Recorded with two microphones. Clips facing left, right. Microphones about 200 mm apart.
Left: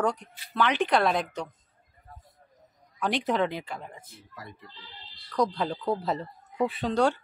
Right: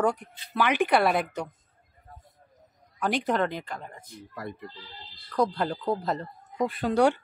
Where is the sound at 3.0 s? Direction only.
Centre (ahead or behind).